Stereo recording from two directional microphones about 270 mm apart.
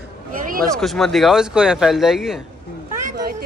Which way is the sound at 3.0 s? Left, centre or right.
Right.